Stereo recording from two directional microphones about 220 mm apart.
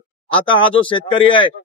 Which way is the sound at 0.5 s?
25° left (ahead or behind).